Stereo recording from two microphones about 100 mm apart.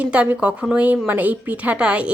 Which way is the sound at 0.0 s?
15° right (ahead or behind).